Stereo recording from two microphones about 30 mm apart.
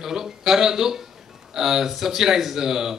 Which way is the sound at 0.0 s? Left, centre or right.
Centre.